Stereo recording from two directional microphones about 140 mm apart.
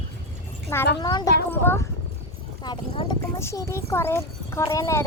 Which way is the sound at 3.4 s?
20° left (ahead or behind).